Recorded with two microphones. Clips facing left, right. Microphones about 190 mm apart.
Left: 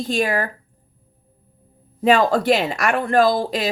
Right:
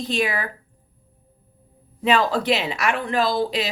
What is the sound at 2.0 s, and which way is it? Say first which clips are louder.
A woman's voice: left 4 dB; 45° left (ahead or behind).